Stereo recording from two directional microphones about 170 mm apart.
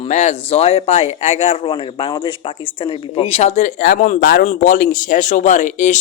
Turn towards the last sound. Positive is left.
turn(degrees=45)  # may be behind; listen again after turning